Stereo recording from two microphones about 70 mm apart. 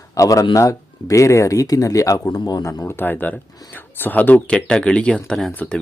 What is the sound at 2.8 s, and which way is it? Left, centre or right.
Speech, left.